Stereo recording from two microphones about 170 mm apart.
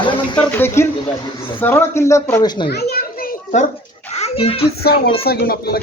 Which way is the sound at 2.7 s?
70° left (ahead or behind).